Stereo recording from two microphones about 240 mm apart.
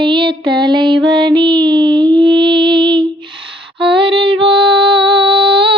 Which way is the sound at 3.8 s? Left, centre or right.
Right.